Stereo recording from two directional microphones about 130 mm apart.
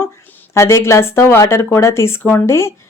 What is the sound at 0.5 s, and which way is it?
Speech, 20° left (ahead or behind).